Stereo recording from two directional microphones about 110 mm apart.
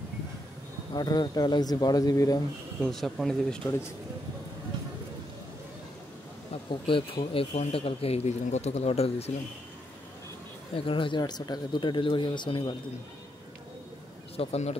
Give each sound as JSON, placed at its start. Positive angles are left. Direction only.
{"t": 0.9, "sound": "speech", "side_deg": 40}
{"t": 2.8, "sound": "speech", "side_deg": 5}
{"t": 6.5, "sound": "speech", "side_deg": 50}
{"t": 10.9, "sound": "speech", "side_deg": 50}
{"t": 14.3, "sound": "speech", "side_deg": 65}